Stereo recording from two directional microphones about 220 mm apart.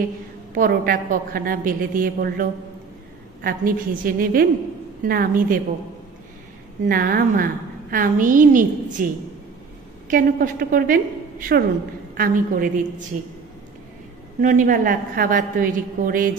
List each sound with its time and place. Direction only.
0.6 s a woman's voice: 40° right (ahead or behind)
3.4 s a woman's voice: 40° right (ahead or behind)
6.9 s a woman's voice: 40° right (ahead or behind)
14.4 s a woman's voice: 35° right (ahead or behind)